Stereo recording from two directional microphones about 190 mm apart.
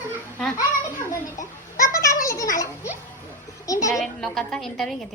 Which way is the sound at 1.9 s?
15° left (ahead or behind).